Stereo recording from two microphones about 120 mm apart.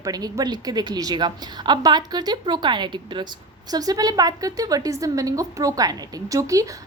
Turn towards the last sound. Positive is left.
turn(degrees=-25)  # may be behind; listen again after turning